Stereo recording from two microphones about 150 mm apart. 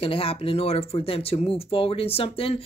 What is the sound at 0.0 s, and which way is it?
Speech, 40° left (ahead or behind).